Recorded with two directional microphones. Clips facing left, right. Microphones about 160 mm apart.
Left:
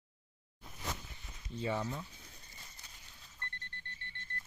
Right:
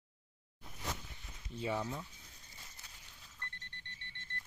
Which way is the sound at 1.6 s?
5° right (ahead or behind).